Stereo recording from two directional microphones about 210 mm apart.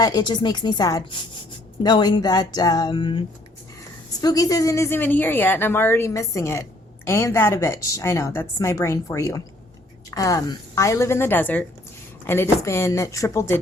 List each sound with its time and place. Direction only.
0.0 s a woman's voice: 20° left (ahead or behind)